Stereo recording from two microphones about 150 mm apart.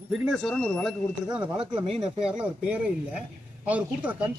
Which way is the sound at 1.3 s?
5° right (ahead or behind).